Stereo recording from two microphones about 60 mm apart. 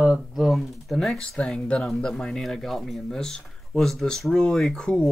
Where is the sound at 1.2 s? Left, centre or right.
Centre.